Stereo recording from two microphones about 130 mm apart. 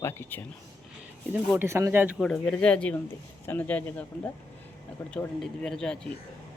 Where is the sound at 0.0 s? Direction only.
15° left (ahead or behind).